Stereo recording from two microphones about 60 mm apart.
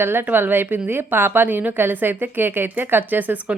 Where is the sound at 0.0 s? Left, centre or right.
Right.